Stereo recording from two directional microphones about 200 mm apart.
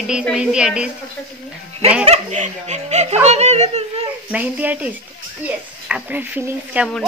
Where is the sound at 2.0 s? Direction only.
35° right (ahead or behind).